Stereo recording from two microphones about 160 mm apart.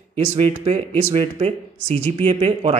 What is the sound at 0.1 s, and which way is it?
Speech, 40° right (ahead or behind).